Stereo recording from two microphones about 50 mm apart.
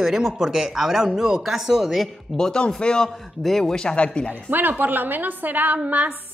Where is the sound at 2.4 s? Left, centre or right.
Centre.